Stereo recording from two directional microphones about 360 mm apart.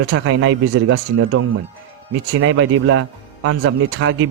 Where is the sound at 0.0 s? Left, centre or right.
Right.